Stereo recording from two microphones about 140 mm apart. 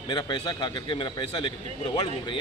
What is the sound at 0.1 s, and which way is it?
A man's voice, 30° left (ahead or behind).